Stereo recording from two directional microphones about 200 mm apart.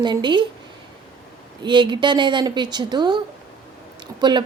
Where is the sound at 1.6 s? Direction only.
25° right (ahead or behind).